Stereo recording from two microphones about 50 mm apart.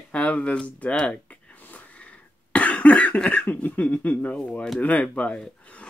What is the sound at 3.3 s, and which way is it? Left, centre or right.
Speech, left.